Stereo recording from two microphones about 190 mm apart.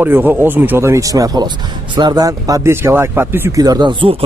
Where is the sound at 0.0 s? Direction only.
10° right (ahead or behind).